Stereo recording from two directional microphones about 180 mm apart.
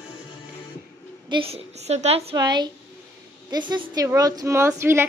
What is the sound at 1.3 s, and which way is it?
A woman's voice, 35° right (ahead or behind).